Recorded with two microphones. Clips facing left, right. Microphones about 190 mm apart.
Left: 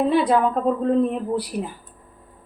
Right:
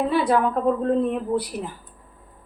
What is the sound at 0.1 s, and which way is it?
Speech, 20° left (ahead or behind).